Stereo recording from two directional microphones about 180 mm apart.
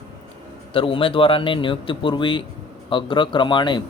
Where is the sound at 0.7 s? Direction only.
30° left (ahead or behind).